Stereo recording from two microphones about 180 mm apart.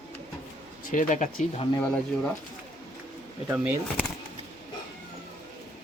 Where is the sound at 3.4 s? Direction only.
5° right (ahead or behind).